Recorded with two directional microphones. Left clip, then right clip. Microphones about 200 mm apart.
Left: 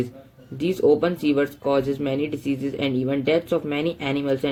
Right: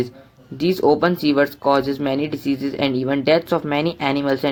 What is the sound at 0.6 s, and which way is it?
Speech, 20° right (ahead or behind).